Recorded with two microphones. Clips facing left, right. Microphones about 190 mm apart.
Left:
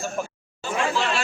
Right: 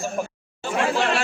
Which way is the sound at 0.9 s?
60° right (ahead or behind).